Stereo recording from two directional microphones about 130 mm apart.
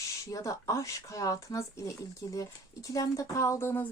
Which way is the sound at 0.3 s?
25° left (ahead or behind).